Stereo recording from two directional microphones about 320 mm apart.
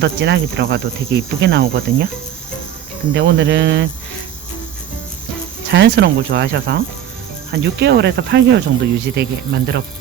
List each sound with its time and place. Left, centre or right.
0.0 s speech: right
3.1 s speech: right
5.6 s speech: right